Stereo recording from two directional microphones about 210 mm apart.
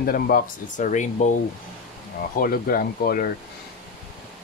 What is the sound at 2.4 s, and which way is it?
Speech, 45° left (ahead or behind).